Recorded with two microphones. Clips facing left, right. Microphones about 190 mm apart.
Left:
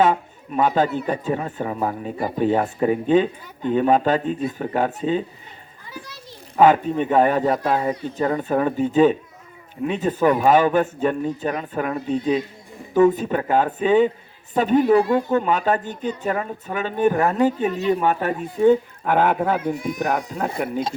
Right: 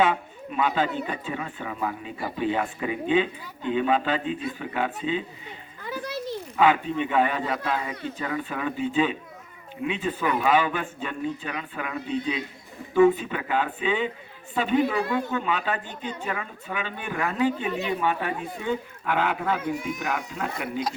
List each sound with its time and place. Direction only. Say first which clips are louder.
0.0 s a woman's voice: left 4 dB; 40° left (ahead or behind)
6.6 s a woman's voice: left 6 dB; 45° left (ahead or behind)